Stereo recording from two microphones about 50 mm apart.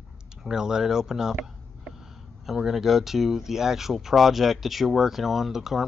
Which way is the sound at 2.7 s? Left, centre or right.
Centre.